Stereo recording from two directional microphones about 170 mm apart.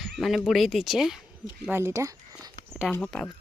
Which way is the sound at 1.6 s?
15° right (ahead or behind).